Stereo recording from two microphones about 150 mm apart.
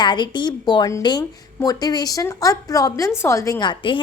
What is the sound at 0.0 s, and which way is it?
A woman's voice, 30° left (ahead or behind).